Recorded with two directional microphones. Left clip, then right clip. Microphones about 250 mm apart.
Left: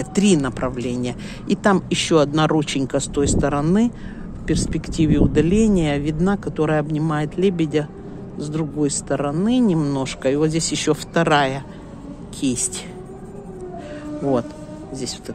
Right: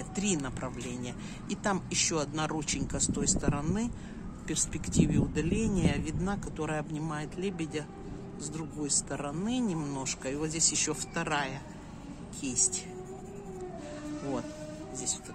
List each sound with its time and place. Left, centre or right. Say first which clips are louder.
0.0 s a woman's voice: left 15 dB; left